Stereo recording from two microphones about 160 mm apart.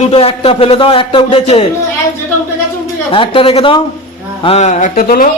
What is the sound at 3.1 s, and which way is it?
A man's voice, 30° left (ahead or behind).